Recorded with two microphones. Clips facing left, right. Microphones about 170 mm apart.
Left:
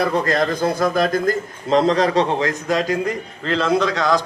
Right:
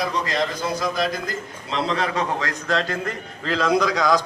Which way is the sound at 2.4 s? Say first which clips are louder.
Left 4 dB; 20° left (ahead or behind).